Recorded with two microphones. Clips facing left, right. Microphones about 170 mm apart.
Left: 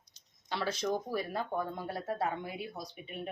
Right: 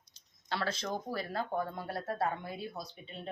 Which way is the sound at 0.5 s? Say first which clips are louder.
Left 2 dB; 15° left (ahead or behind).